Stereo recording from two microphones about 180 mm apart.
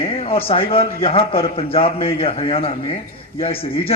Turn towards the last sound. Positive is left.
turn(degrees=30)  # may be behind; listen again after turning